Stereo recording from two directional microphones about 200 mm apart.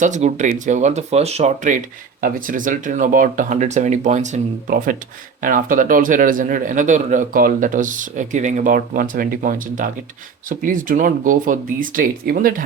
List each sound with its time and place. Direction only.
0.0 s a man's voice: 35° right (ahead or behind)